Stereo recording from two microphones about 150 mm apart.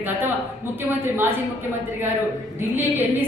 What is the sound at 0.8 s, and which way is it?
Speech, 15° right (ahead or behind).